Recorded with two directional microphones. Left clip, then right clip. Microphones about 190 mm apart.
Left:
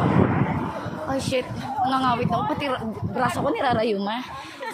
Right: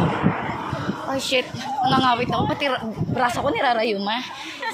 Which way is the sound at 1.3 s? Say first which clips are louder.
Right 3 dB; centre (ahead or behind).